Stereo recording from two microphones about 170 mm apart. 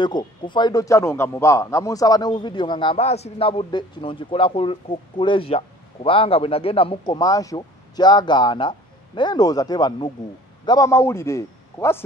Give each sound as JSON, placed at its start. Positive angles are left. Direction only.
{"t": 0.0, "sound": "a man's voice", "side_deg": 25}